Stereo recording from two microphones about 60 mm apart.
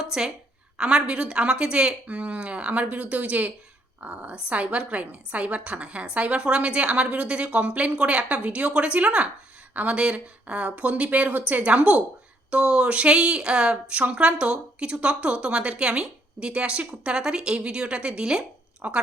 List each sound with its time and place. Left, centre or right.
0.0 s a woman's voice: centre
18.8 s a woman's voice: right